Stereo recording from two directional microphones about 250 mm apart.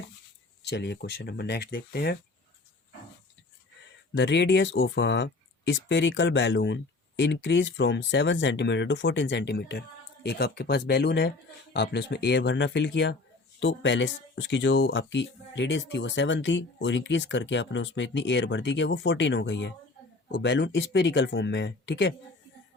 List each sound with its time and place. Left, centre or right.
0.7 s speech: left
4.1 s speech: left